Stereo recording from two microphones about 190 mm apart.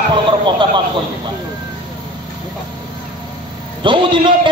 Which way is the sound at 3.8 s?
25° right (ahead or behind).